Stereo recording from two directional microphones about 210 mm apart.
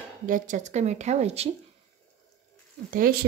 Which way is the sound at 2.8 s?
45° right (ahead or behind).